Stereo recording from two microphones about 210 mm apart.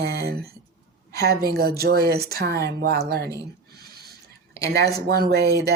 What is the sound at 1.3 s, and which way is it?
Speech, 45° right (ahead or behind).